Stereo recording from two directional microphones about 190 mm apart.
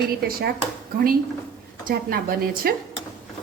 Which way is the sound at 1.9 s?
50° right (ahead or behind).